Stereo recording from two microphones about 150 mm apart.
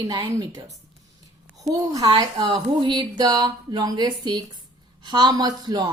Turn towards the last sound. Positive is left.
turn(degrees=-30)  # may be behind; listen again after turning